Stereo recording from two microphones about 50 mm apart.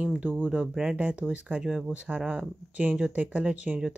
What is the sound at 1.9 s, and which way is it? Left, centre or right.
Speech, right.